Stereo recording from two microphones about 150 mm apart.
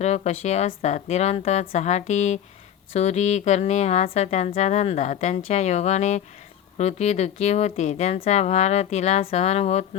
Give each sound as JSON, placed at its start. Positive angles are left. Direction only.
{"t": 0.0, "sound": "a woman's voice", "side_deg": 50}